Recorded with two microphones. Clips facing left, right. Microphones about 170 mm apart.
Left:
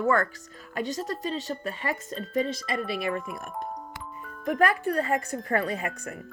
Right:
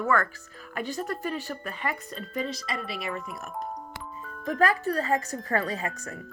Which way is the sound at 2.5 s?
50° left (ahead or behind).